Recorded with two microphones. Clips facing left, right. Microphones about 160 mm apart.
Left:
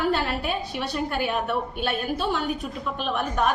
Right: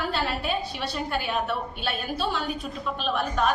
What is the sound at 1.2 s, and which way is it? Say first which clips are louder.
A woman's voice: left 2 dB; 50° left (ahead or behind).